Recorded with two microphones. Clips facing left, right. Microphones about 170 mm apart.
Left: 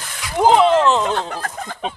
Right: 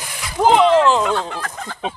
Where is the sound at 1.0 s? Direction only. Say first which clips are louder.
Right 1 dB; 40° left (ahead or behind).